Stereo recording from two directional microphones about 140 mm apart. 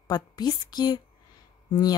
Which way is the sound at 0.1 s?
30° left (ahead or behind).